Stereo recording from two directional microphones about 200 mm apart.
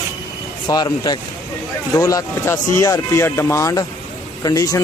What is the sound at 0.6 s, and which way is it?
Speech, 20° left (ahead or behind).